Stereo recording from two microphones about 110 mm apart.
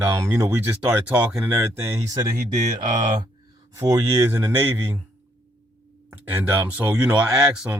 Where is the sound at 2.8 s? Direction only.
40° right (ahead or behind).